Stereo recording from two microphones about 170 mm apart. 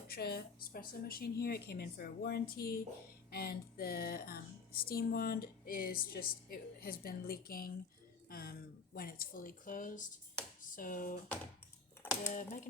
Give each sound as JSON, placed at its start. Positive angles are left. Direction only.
{"t": 0.1, "sound": "speech", "side_deg": 65}
{"t": 12.3, "sound": "speech", "side_deg": 45}